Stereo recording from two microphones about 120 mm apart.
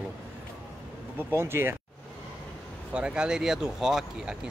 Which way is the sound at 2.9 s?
10° right (ahead or behind).